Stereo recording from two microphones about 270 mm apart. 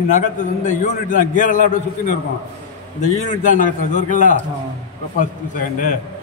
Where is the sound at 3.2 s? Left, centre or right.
Left.